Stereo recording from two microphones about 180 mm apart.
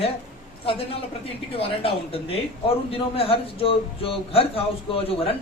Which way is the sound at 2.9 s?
30° left (ahead or behind).